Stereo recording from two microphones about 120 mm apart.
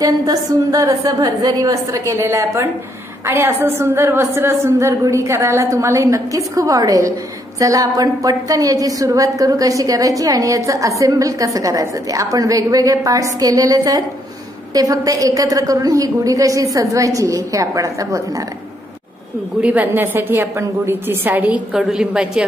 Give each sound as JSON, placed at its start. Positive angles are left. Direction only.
{"t": 0.0, "sound": "a woman's voice", "side_deg": -30}
{"t": 19.6, "sound": "a woman's voice", "side_deg": -15}
{"t": 21.7, "sound": "a woman's voice", "side_deg": -5}